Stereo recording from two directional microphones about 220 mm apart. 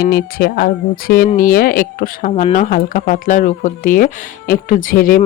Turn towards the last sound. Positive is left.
turn(degrees=40)  # may be behind; listen again after turning